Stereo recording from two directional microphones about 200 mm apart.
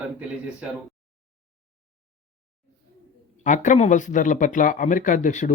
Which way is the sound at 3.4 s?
40° left (ahead or behind).